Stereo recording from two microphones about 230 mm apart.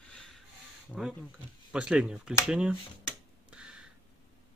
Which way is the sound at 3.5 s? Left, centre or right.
Centre.